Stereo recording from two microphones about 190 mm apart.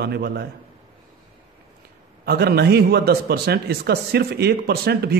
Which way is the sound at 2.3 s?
55° right (ahead or behind).